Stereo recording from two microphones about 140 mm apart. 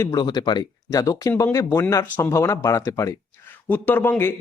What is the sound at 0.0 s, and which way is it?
Speech, 25° left (ahead or behind).